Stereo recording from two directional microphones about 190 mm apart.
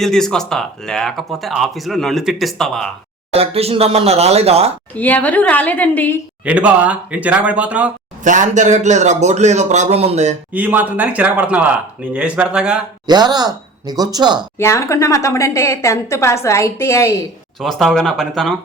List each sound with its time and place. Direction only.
0.0 s speech: 5° left (ahead or behind)
3.3 s speech: 30° right (ahead or behind)
4.9 s a woman's voice: 10° left (ahead or behind)
6.4 s speech: 5° right (ahead or behind)
8.2 s speech: 40° right (ahead or behind)
10.5 s speech: 10° right (ahead or behind)
13.1 s speech: 20° right (ahead or behind)
14.6 s a woman's voice: 15° left (ahead or behind)
17.6 s speech: centre (ahead or behind)